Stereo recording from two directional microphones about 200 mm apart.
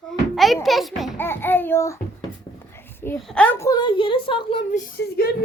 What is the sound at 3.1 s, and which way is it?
A child's voice, 5° left (ahead or behind).